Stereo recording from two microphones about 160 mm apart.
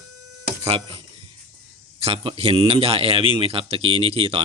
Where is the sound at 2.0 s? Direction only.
35° right (ahead or behind).